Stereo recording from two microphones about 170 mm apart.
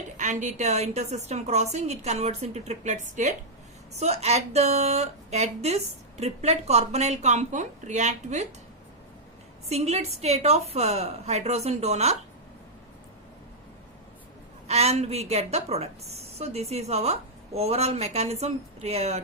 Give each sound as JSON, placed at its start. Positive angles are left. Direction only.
{"t": 0.2, "sound": "a woman's voice", "side_deg": -45}
{"t": 9.6, "sound": "a woman's voice", "side_deg": -40}
{"t": 14.7, "sound": "a woman's voice", "side_deg": -40}